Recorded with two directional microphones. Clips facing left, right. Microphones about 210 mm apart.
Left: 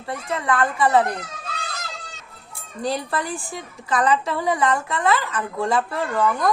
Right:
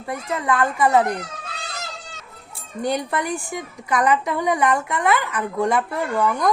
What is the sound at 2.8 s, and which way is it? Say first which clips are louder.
A woman's voice: right 2 dB; 20° right (ahead or behind).